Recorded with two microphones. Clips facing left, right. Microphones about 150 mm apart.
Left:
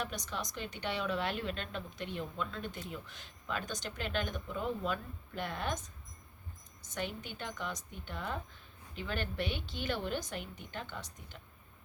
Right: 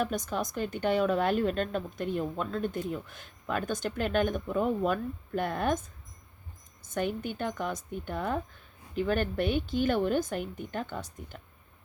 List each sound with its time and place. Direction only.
0.0 s a woman's voice: 45° right (ahead or behind)
6.9 s a woman's voice: 50° right (ahead or behind)